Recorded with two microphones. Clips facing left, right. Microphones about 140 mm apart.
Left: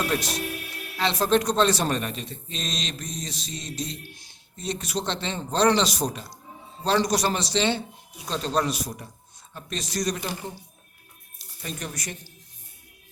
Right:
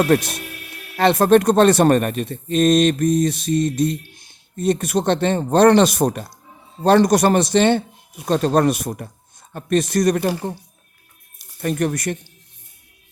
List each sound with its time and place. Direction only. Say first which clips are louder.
0.0 s speech: right 9 dB; 55° right (ahead or behind)